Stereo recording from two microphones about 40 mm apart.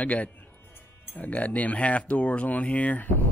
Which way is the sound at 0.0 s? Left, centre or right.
Left.